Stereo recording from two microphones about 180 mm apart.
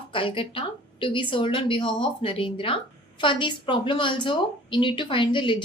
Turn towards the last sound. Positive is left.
turn(degrees=25)  # may be behind; listen again after turning